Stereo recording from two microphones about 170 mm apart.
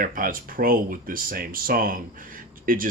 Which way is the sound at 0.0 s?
55° right (ahead or behind).